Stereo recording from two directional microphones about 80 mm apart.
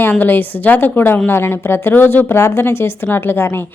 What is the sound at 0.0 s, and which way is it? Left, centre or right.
A woman's voice, left.